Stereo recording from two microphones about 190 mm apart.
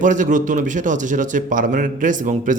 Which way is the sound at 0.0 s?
40° right (ahead or behind).